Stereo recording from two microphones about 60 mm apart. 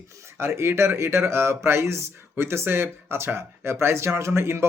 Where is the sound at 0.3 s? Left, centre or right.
Right.